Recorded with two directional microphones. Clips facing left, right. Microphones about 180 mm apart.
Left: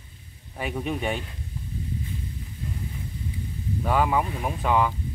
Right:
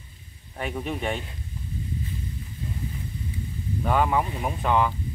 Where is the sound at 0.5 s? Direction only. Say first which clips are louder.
Left 1 dB; centre (ahead or behind).